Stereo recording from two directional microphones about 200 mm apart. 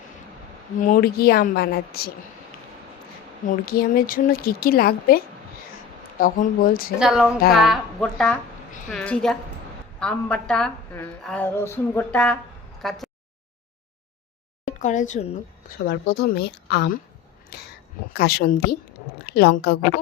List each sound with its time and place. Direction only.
0.8 s speech: 45° left (ahead or behind)
3.4 s speech: 45° left (ahead or behind)
7.0 s a woman's voice: 5° right (ahead or behind)
14.6 s speech: 40° left (ahead or behind)
15.9 s speech: 50° left (ahead or behind)